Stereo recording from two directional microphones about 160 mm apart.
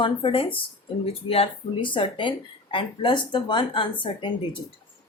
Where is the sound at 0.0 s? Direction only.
30° left (ahead or behind).